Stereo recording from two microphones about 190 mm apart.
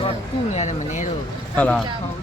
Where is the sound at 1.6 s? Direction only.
5° left (ahead or behind).